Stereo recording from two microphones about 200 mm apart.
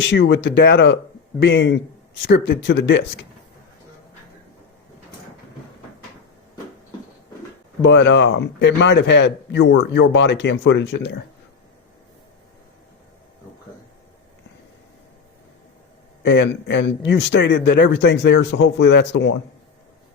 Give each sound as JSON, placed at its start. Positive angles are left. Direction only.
{"t": 0.0, "sound": "a man's voice", "side_deg": 60}
{"t": 7.8, "sound": "a man's voice", "side_deg": 60}
{"t": 16.2, "sound": "a man's voice", "side_deg": 60}